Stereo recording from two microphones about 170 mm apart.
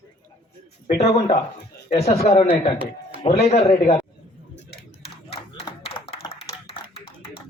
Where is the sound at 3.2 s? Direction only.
35° left (ahead or behind).